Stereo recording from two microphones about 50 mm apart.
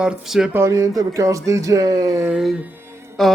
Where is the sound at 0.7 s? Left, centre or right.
Right.